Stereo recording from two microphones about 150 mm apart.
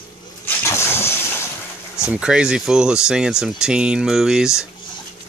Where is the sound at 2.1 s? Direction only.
5° right (ahead or behind).